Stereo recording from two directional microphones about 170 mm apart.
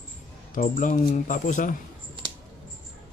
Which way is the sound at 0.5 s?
50° left (ahead or behind).